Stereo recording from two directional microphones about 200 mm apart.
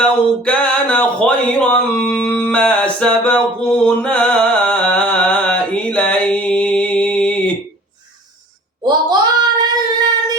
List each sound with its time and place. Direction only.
0.0 s speech: 5° left (ahead or behind)
3.8 s music: 5° left (ahead or behind)
8.8 s child singing: 20° right (ahead or behind)